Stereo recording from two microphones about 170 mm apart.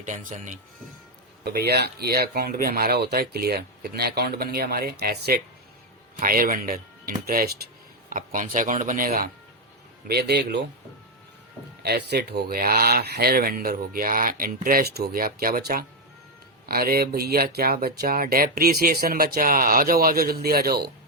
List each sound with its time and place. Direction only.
0.0 s speech: 50° right (ahead or behind)
1.5 s speech: 70° right (ahead or behind)
10.1 s a man's voice: 70° right (ahead or behind)
11.8 s speech: 70° right (ahead or behind)